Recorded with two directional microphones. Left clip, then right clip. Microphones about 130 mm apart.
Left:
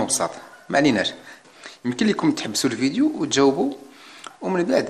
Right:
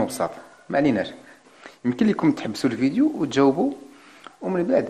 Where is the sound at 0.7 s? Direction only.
Centre (ahead or behind).